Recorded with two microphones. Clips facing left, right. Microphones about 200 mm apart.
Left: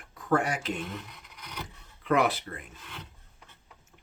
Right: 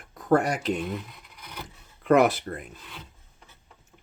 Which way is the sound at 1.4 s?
5° right (ahead or behind).